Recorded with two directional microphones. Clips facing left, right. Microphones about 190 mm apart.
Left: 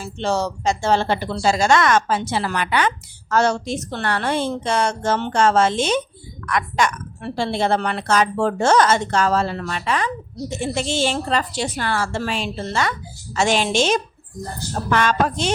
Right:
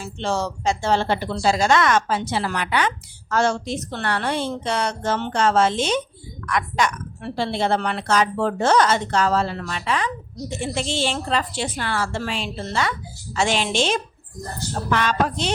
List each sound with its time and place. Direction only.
0.0 s a woman's voice: 40° left (ahead or behind)